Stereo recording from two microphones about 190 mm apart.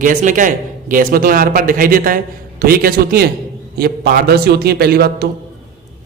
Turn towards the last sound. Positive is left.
turn(degrees=-55)  # may be behind; listen again after turning